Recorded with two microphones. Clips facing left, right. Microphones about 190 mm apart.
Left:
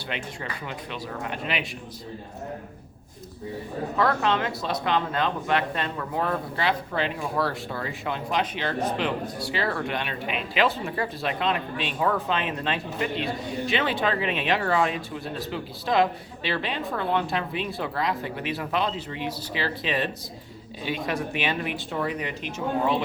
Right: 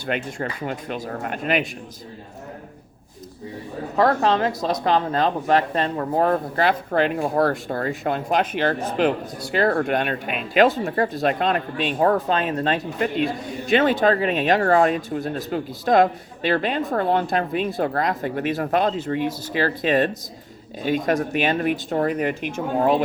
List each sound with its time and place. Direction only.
0.1 s speech: 45° right (ahead or behind)
3.9 s speech: 40° right (ahead or behind)